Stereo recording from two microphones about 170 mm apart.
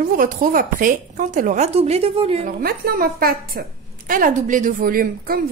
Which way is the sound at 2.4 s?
60° right (ahead or behind).